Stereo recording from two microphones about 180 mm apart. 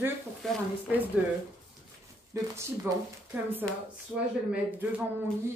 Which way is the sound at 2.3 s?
20° right (ahead or behind).